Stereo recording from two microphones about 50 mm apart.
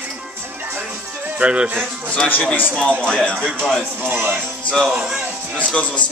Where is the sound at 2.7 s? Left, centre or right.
Left.